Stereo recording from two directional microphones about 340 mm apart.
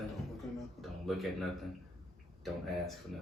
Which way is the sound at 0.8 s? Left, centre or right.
Centre.